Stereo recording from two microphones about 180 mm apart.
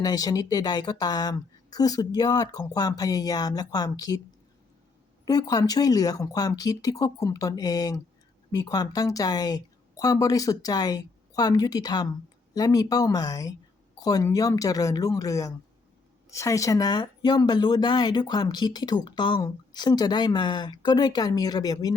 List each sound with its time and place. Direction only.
0.0 s speech: 20° left (ahead or behind)
5.2 s speech: 20° left (ahead or behind)